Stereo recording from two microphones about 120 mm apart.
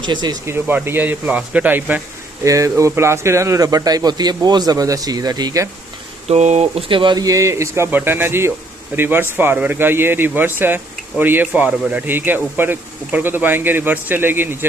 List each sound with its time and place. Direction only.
0.0 s speech: 40° right (ahead or behind)
0.4 s speech: 20° right (ahead or behind)
2.4 s speech: 25° right (ahead or behind)
6.2 s speech: 65° right (ahead or behind); by 14.7 s 15° right (ahead or behind)